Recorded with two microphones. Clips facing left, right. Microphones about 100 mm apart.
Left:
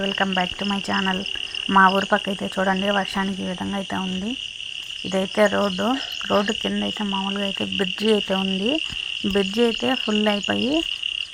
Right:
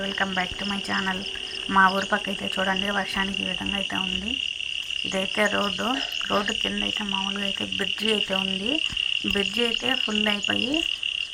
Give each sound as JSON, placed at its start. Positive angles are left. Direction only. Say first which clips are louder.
{"t": 0.0, "sound": "insect", "louder": "left 5 dB", "side_deg": 25}
{"t": 1.7, "sound": "insect", "louder": "left 4 dB", "side_deg": 35}
{"t": 5.1, "sound": "cricket", "louder": "left 6 dB", "side_deg": 15}
{"t": 7.2, "sound": "insect", "louder": "left 5 dB", "side_deg": 25}